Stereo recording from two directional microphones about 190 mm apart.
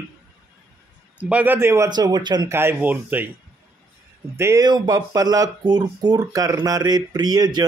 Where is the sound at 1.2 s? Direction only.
10° right (ahead or behind).